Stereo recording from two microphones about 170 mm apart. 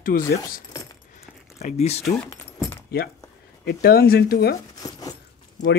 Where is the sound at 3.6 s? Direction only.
65° left (ahead or behind).